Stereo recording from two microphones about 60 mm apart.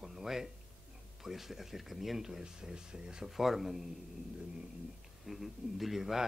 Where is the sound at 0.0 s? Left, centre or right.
Centre.